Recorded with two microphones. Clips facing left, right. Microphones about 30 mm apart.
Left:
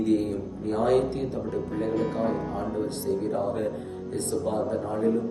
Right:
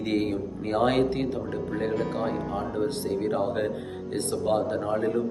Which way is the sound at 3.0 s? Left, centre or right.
Right.